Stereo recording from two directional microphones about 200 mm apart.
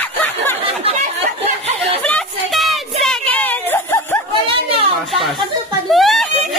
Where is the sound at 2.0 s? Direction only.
5° left (ahead or behind).